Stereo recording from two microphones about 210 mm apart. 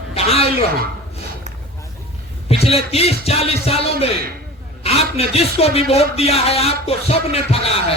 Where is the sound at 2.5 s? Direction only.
30° left (ahead or behind).